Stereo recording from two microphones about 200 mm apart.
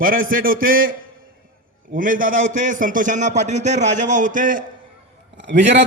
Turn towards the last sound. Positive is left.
turn(degrees=-60)  # may be behind; listen again after turning